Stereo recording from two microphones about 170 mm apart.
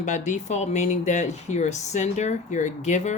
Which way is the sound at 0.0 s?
45° left (ahead or behind).